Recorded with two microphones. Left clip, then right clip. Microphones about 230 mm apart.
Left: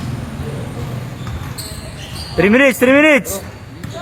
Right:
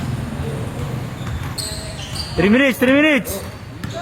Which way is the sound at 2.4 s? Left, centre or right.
Left.